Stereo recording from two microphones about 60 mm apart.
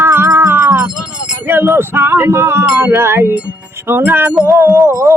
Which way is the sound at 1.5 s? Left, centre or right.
Right.